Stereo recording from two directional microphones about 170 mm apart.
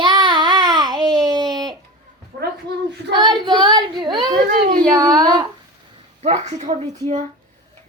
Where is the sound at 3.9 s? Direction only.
25° right (ahead or behind).